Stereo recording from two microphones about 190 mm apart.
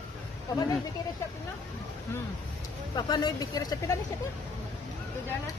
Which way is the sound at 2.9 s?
20° left (ahead or behind).